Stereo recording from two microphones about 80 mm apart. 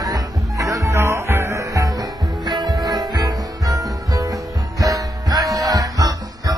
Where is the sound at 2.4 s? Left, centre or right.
Right.